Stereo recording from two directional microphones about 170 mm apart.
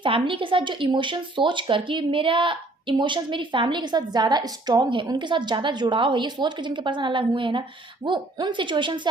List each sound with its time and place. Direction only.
0.0 s speech: 30° right (ahead or behind)